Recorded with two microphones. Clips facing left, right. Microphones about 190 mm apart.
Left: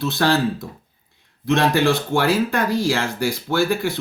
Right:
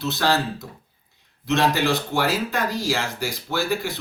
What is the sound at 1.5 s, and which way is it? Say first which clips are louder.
Speech: left 3 dB; 55° left (ahead or behind).